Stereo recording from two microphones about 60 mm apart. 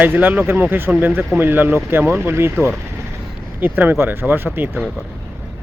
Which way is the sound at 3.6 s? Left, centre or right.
Right.